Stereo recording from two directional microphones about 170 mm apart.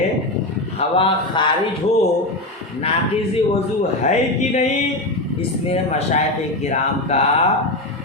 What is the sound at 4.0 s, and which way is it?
Speech, 45° left (ahead or behind).